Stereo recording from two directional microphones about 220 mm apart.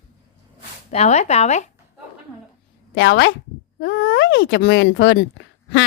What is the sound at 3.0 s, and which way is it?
Speech, 55° left (ahead or behind).